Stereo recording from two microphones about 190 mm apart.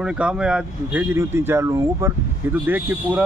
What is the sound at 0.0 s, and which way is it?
Speech, 5° right (ahead or behind).